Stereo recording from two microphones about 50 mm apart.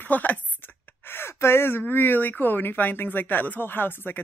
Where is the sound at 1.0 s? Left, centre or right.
Left.